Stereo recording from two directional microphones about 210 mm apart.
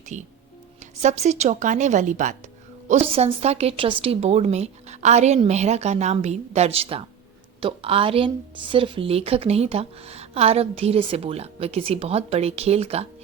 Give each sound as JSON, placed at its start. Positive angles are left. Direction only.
{"t": 0.0, "sound": "a woman's voice", "side_deg": -35}